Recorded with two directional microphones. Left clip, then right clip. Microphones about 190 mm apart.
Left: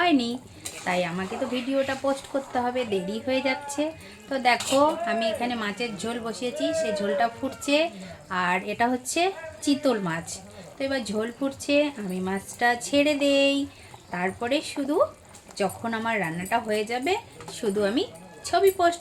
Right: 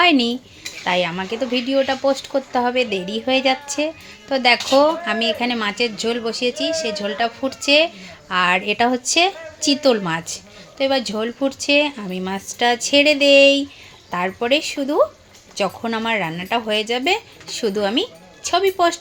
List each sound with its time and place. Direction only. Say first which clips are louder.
0.0 s dishes: right 8 dB; 30° right (ahead or behind)
0.9 s speech: right 7 dB; 30° right (ahead or behind)